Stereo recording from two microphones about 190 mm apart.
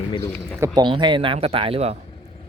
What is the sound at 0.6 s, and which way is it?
Speech, 20° right (ahead or behind).